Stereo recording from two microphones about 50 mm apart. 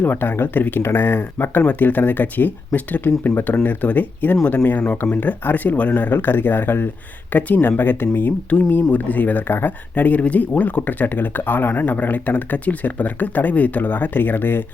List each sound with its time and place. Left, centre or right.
0.0 s speech: left
0.8 s speech: left